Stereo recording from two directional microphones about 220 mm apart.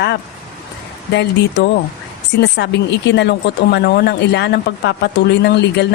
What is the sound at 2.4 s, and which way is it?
Speech, 50° left (ahead or behind).